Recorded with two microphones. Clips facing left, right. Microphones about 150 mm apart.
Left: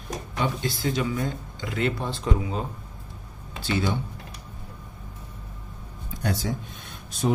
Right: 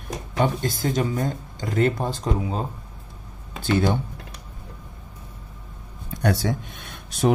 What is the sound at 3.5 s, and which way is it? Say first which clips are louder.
Speech: right 5 dB; 50° right (ahead or behind).